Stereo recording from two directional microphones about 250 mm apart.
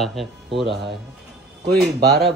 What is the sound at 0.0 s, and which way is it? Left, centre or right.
Speech, centre.